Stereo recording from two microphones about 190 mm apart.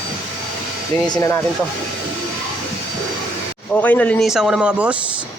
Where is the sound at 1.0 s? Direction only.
20° left (ahead or behind).